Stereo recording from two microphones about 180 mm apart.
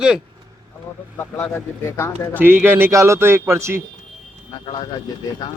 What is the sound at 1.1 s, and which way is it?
Speech, 15° left (ahead or behind).